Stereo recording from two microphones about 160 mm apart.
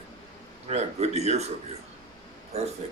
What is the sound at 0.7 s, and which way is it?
Speech, 40° right (ahead or behind).